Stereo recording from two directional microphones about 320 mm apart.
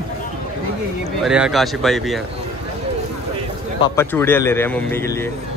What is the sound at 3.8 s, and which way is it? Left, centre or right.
Speech, centre.